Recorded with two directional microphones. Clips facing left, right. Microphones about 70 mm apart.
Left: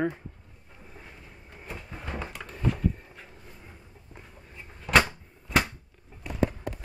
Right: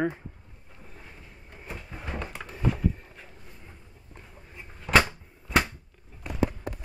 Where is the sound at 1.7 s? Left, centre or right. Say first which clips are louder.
Even; centre.